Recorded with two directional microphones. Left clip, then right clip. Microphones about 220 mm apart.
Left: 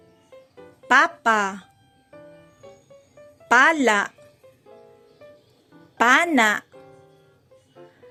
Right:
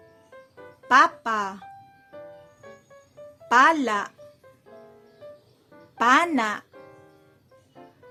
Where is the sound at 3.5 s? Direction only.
15° left (ahead or behind).